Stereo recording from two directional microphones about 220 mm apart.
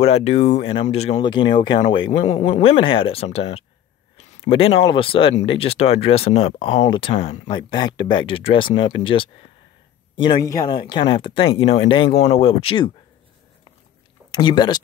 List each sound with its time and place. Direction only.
0.0 s speech: 30° left (ahead or behind)
14.3 s speech: 20° left (ahead or behind)